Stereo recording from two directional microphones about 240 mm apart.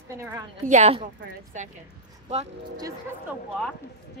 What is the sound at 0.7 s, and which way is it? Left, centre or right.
Speech, right.